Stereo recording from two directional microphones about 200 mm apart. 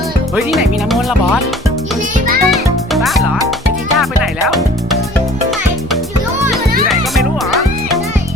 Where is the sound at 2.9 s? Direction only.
Centre (ahead or behind).